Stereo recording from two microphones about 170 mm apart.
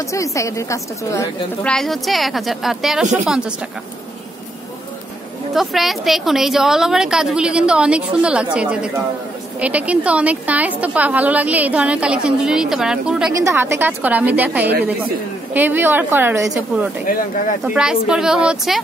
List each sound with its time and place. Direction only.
0.1 s a woman's voice: 20° left (ahead or behind)
1.7 s a woman's voice: centre (ahead or behind)
5.5 s a woman's voice: centre (ahead or behind)
13.3 s a woman's voice: 15° right (ahead or behind)
14.6 s a woman's voice: 75° right (ahead or behind)
15.5 s a woman's voice: 10° right (ahead or behind)